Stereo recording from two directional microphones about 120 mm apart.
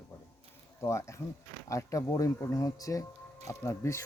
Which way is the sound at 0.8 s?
25° left (ahead or behind).